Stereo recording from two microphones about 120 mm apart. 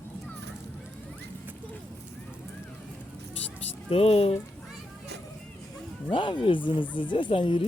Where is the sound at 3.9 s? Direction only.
55° left (ahead or behind).